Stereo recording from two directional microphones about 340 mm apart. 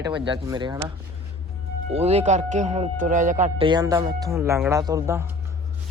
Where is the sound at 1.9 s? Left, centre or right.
Centre.